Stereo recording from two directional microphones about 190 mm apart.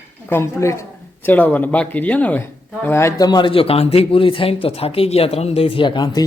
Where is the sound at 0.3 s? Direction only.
15° left (ahead or behind).